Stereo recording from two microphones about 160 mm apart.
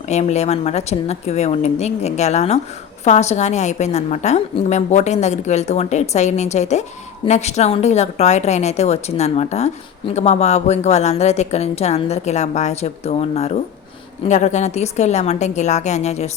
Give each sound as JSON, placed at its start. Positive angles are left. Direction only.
{"t": 0.1, "sound": "a woman's voice", "side_deg": 45}